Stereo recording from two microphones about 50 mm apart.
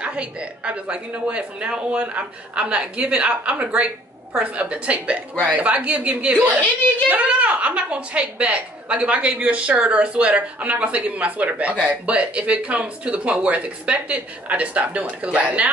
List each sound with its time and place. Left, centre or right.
0.0 s a woman's voice: right